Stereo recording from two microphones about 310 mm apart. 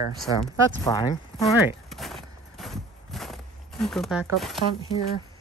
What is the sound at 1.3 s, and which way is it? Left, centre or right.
Walk, centre.